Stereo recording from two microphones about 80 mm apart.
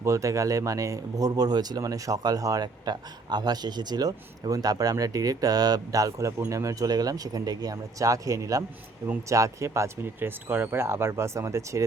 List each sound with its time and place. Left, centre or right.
0.0 s speech: right